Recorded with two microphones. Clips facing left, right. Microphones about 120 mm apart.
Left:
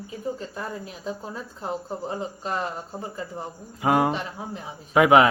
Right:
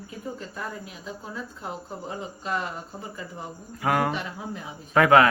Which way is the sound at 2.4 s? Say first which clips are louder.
Right 1 dB; 35° left (ahead or behind).